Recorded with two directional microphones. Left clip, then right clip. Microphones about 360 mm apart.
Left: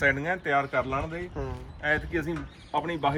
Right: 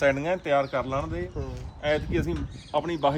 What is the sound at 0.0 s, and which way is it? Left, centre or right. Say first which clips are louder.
A man's voice: right 1 dB; centre.